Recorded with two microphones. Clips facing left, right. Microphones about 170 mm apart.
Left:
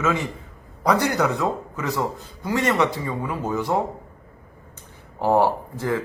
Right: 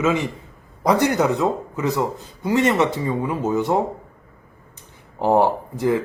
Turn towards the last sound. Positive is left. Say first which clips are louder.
# right 5 dB
turn(degrees=-15)  # may be behind; listen again after turning